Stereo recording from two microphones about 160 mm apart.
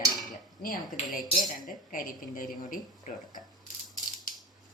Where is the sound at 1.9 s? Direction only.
60° left (ahead or behind).